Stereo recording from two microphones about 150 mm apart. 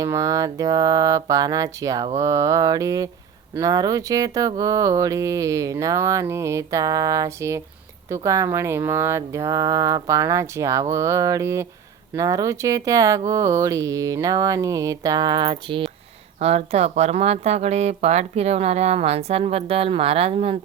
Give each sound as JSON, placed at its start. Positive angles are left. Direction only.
{"t": 0.0, "sound": "speech", "side_deg": -20}
{"t": 16.4, "sound": "speech", "side_deg": -45}